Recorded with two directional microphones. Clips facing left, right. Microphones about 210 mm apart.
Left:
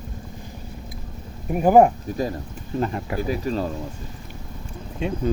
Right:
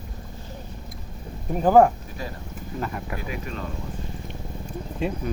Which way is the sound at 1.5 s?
15° left (ahead or behind).